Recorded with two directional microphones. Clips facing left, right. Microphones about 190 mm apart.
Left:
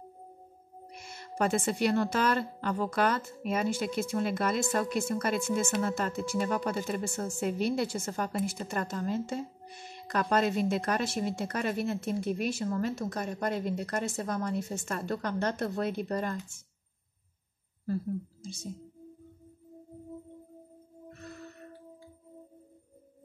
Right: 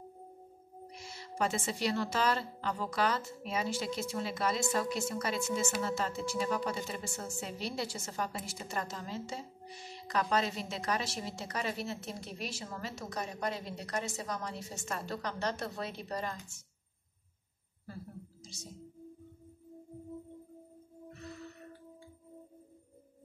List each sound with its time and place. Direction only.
0.9 s a woman's voice: 55° left (ahead or behind)
18.4 s speech: 55° left (ahead or behind)